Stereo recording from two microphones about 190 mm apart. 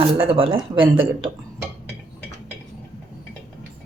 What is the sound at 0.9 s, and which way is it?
Speech, 90° right.